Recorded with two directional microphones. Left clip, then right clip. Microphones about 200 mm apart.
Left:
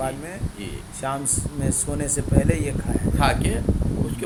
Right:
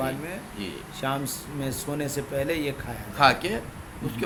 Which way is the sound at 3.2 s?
20° right (ahead or behind).